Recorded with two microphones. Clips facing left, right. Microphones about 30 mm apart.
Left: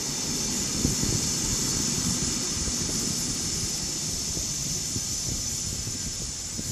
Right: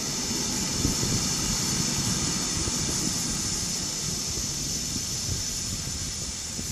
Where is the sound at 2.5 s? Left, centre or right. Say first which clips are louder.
Right 1 dB; right.